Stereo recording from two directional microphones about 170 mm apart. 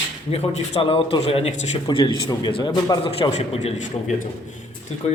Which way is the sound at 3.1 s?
35° left (ahead or behind).